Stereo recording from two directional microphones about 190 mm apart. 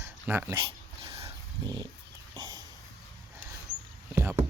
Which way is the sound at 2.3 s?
20° right (ahead or behind).